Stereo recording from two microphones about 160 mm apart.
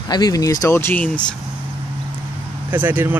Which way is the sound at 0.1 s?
25° left (ahead or behind).